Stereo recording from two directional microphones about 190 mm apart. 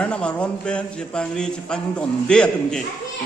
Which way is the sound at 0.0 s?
5° left (ahead or behind).